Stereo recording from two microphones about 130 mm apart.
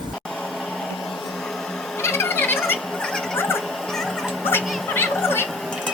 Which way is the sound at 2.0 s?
20° left (ahead or behind).